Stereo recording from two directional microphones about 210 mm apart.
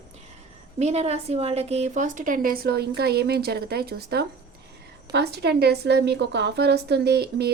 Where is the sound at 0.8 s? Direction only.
30° right (ahead or behind).